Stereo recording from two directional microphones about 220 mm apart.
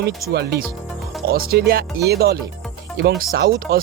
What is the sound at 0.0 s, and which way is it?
Speech, 50° right (ahead or behind).